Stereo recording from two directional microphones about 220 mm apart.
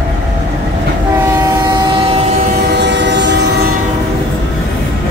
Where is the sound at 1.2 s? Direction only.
15° right (ahead or behind).